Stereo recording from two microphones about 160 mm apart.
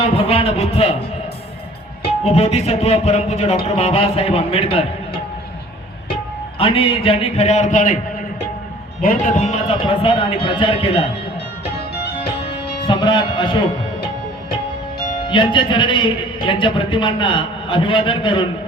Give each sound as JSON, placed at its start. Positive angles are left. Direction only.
{"t": 0.2, "sound": "a man's voice", "side_deg": 35}
{"t": 2.0, "sound": "a man's voice", "side_deg": 40}
{"t": 6.6, "sound": "a man's voice", "side_deg": 35}
{"t": 9.0, "sound": "speech", "side_deg": 55}
{"t": 9.7, "sound": "a man's voice", "side_deg": 35}
{"t": 12.8, "sound": "a man's voice", "side_deg": 30}
{"t": 15.3, "sound": "a man's voice", "side_deg": 30}